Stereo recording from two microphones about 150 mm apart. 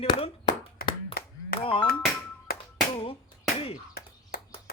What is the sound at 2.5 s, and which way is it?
Hands, 80° left.